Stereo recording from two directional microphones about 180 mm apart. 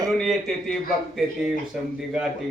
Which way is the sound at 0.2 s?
Centre (ahead or behind).